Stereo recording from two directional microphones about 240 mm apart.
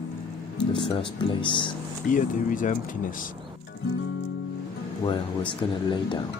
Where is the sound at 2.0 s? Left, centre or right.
Left.